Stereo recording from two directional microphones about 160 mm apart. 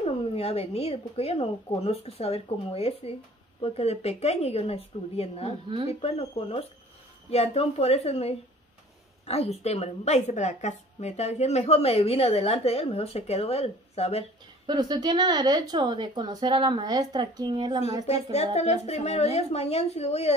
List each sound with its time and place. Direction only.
0.0 s a woman's voice: 40° left (ahead or behind)
14.7 s speech: 25° right (ahead or behind)
18.0 s a woman's voice: 40° left (ahead or behind)